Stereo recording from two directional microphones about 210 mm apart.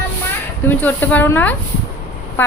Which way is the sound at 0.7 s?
10° left (ahead or behind).